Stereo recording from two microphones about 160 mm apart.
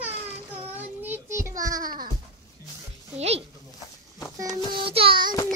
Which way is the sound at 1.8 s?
60° right (ahead or behind).